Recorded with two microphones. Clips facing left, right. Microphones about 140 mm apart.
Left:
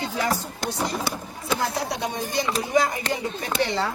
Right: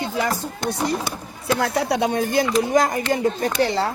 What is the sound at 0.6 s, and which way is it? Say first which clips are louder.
Speech: right 4 dB; 55° right (ahead or behind).